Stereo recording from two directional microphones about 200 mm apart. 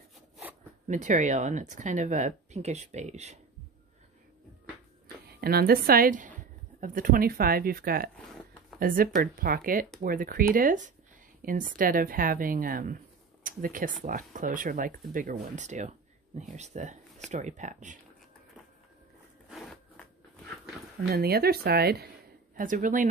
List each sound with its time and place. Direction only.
0.8 s speech: 40° right (ahead or behind)
5.0 s a woman's voice: 50° right (ahead or behind)
19.5 s a sound: 5° left (ahead or behind)
21.1 s speech: 50° right (ahead or behind)
22.6 s speech: 40° right (ahead or behind)